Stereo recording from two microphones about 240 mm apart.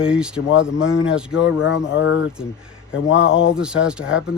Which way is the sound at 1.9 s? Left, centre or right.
Left.